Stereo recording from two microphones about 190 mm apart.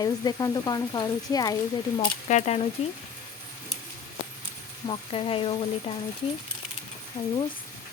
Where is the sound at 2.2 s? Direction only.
35° left (ahead or behind).